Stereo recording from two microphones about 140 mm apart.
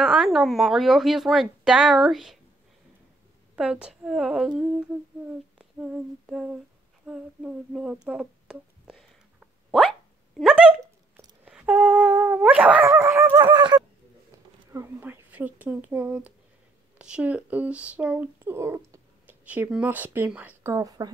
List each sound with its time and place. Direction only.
0.0 s speech: 5° right (ahead or behind)
3.5 s speech: 5° right (ahead or behind)
5.6 s humming: 10° right (ahead or behind)
7.1 s a sound: 5° right (ahead or behind)
11.1 s dog: 10° right (ahead or behind)
13.5 s fowl: 35° right (ahead or behind)
14.7 s speech: 20° right (ahead or behind)
20.7 s a woman's voice: 25° right (ahead or behind)